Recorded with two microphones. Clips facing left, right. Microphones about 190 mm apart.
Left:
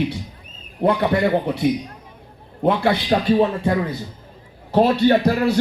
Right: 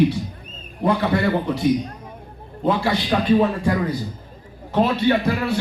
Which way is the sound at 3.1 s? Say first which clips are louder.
Even; 40° left (ahead or behind).